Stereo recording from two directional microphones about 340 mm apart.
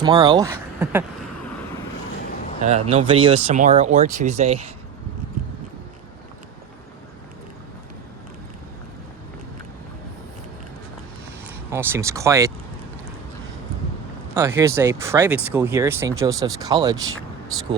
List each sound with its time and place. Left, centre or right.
0.0 s speech: centre
2.6 s speech: centre
11.7 s speech: centre
14.3 s speech: centre